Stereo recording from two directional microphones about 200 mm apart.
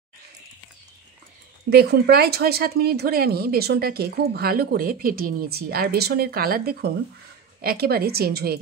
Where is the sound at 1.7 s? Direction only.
55° right (ahead or behind).